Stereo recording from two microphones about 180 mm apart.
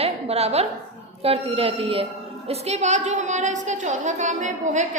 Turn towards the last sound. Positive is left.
turn(degrees=-40)  # may be behind; listen again after turning